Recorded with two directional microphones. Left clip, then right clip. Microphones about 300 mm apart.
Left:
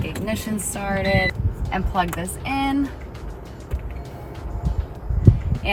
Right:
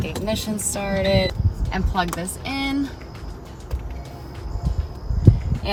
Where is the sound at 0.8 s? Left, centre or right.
Centre.